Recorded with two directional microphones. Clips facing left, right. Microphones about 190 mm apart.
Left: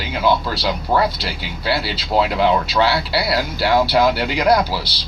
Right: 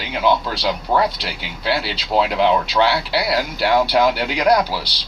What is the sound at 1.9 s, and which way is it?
Speech, 10° left (ahead or behind).